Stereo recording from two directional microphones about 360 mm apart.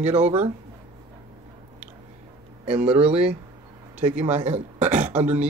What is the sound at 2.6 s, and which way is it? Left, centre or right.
Speech, centre.